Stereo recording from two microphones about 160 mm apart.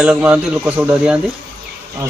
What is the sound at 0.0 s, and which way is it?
Speech, 5° right (ahead or behind).